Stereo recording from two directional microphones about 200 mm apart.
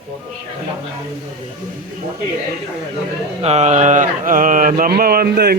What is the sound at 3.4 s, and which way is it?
Mantra, 30° right (ahead or behind).